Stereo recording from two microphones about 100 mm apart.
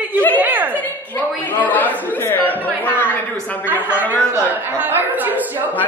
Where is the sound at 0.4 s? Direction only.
15° right (ahead or behind).